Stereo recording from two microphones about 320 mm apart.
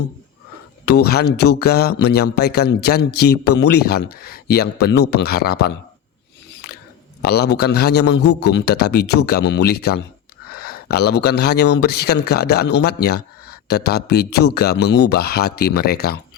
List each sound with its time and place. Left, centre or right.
0.9 s speech: left
7.2 s speech: left